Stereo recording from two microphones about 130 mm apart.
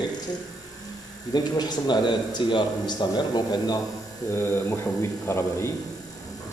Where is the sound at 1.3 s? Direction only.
35° left (ahead or behind).